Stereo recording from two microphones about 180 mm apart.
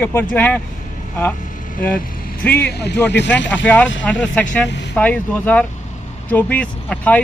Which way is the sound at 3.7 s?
10° left (ahead or behind).